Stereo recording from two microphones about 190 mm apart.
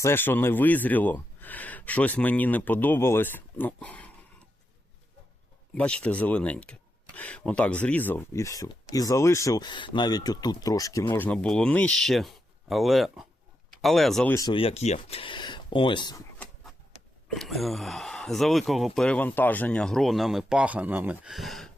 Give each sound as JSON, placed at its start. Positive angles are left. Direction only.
{"t": 0.0, "sound": "speech", "side_deg": 10}
{"t": 5.7, "sound": "speech", "side_deg": 5}
{"t": 14.3, "sound": "speech", "side_deg": 25}
{"t": 16.4, "sound": "a sound", "side_deg": 10}
{"t": 17.2, "sound": "speech", "side_deg": 0}